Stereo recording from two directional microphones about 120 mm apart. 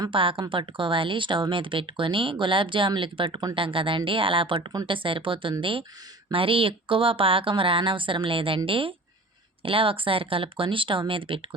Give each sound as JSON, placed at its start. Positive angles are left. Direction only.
{"t": 0.1, "sound": "speech", "side_deg": -45}